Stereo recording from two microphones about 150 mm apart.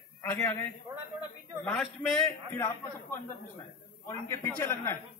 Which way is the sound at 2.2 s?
15° left (ahead or behind).